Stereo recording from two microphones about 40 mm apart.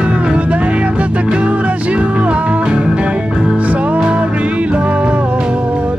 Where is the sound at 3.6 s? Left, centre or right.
Right.